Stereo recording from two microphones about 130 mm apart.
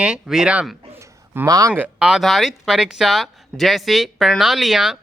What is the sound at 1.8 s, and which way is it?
Speech, 10° right (ahead or behind).